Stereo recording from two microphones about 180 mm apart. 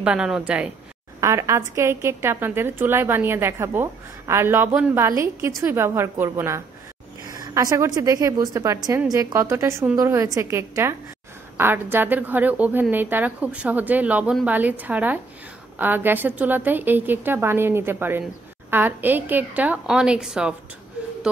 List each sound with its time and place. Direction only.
0.0 s speech: 5° right (ahead or behind)
1.2 s a woman's voice: 15° right (ahead or behind)